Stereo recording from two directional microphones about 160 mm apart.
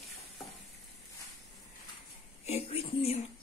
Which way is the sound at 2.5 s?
40° left (ahead or behind).